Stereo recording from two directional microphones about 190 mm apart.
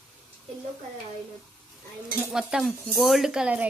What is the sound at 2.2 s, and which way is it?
Cutlery, 5° right (ahead or behind).